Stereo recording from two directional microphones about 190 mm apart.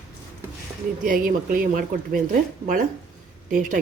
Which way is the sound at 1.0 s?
45° right (ahead or behind).